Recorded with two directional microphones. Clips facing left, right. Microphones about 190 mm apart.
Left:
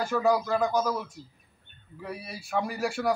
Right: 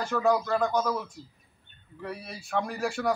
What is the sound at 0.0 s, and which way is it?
A man's voice, 5° left (ahead or behind).